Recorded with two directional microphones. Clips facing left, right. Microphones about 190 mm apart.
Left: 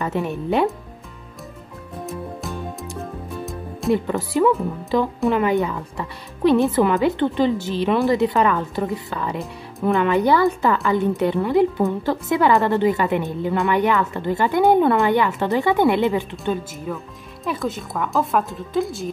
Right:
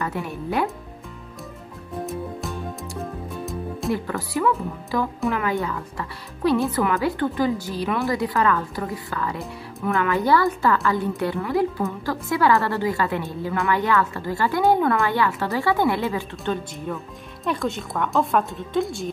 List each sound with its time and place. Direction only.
0.0 s a woman's voice: 20° left (ahead or behind)
2.0 s music: centre (ahead or behind)
3.9 s a woman's voice: 20° left (ahead or behind)
16.7 s a woman's voice: 5° left (ahead or behind)